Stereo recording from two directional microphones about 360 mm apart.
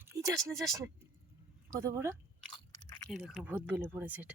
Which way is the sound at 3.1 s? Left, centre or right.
Centre.